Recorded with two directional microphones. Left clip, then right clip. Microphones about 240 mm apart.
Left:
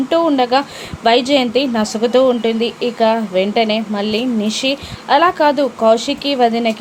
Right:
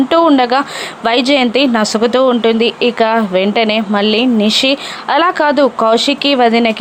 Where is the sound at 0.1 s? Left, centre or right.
Centre.